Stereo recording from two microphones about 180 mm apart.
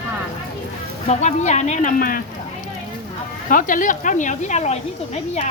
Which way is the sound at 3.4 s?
50° left (ahead or behind).